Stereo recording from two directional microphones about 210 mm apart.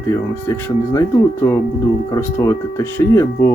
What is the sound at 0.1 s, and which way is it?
Speech, 10° left (ahead or behind).